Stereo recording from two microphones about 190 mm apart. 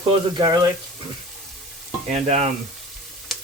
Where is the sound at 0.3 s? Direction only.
20° right (ahead or behind).